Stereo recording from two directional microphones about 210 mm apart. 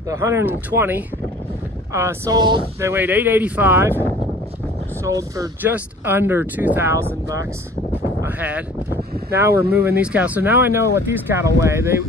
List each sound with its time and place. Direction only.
0.1 s speech: 10° right (ahead or behind)
2.9 s speech: 10° right (ahead or behind)
5.0 s speech: 15° right (ahead or behind)